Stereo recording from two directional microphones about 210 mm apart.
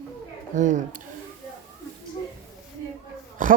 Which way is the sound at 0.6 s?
35° right (ahead or behind).